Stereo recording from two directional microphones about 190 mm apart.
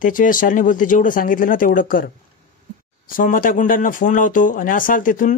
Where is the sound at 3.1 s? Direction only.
45° left (ahead or behind).